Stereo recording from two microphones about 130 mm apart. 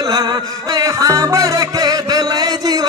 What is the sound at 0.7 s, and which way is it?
Music, 25° right (ahead or behind).